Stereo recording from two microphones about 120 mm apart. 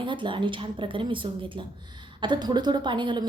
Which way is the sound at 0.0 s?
40° right (ahead or behind).